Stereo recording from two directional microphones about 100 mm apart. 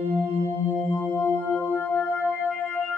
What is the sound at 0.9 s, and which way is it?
Music, 15° left (ahead or behind).